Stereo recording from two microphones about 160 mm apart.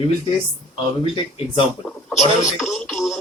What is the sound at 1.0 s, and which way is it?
Speech, 35° left (ahead or behind).